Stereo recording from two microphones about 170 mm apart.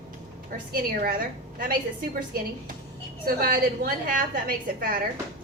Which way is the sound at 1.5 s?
60° right (ahead or behind).